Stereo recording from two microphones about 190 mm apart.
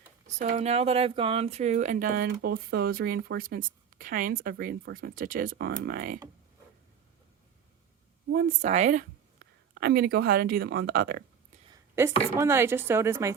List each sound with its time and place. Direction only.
0.3 s speech: 35° right (ahead or behind)
8.3 s speech: 55° right (ahead or behind)
8.6 s speech: 40° right (ahead or behind)
9.4 s speech: 55° right (ahead or behind)
11.7 s a sound: 15° right (ahead or behind)
12.4 s speech: 15° right (ahead or behind)